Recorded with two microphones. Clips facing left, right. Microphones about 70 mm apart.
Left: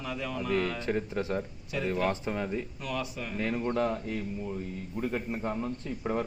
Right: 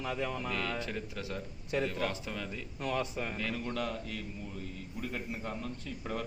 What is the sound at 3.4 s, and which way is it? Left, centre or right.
A man's voice, left.